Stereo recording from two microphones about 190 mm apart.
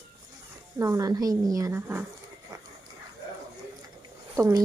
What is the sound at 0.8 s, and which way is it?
Speech, 15° right (ahead or behind).